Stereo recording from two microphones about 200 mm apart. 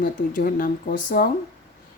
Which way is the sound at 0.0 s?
45° left (ahead or behind).